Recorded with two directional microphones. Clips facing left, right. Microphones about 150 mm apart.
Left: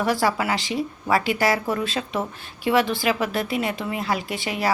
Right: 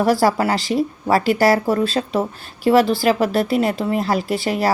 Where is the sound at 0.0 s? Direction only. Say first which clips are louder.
Right 6 dB; 40° right (ahead or behind).